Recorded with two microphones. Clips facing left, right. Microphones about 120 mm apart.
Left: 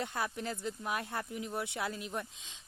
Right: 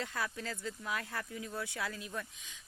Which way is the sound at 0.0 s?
20° left (ahead or behind).